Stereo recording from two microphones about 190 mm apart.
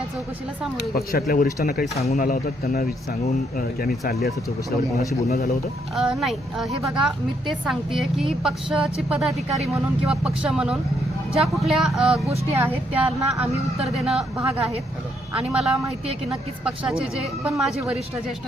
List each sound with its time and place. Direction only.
0.9 s speech: 50° left (ahead or behind)
6.0 s a woman's voice: centre (ahead or behind)